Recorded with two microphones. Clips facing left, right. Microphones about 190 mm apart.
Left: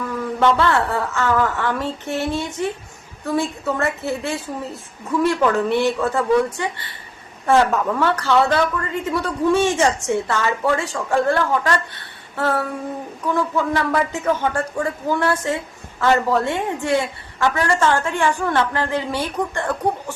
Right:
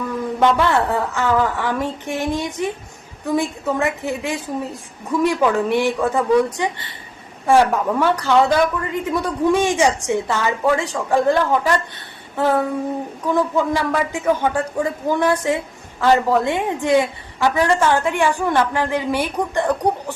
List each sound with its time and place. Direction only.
0.3 s a woman's voice: 15° right (ahead or behind)